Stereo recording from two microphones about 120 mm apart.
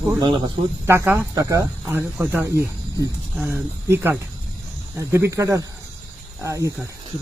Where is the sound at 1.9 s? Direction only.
15° right (ahead or behind).